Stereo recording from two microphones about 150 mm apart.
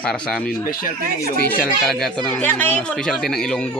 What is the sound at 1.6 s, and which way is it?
Speech, 5° left (ahead or behind).